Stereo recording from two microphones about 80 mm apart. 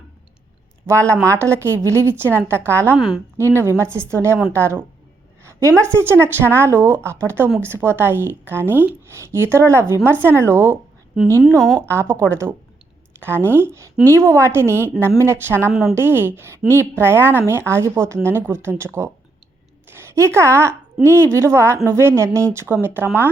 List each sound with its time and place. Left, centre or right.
0.9 s a woman's voice: right
5.4 s a sound: right
5.8 s a woman's voice: right
11.9 s a woman's voice: right
15.7 s a woman's voice: centre
16.0 s a woman's voice: right
20.0 s a woman's voice: right